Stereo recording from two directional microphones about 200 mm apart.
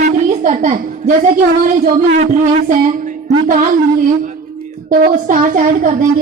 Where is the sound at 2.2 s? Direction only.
40° right (ahead or behind).